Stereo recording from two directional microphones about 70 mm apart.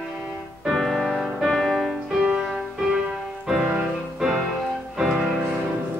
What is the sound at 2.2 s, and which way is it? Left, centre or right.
Music, centre.